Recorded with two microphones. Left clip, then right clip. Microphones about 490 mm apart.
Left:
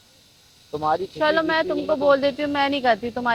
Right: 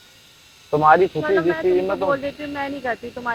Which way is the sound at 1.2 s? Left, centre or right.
Left.